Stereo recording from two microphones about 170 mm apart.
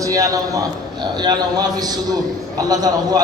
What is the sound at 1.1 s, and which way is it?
A man's voice, 25° right (ahead or behind).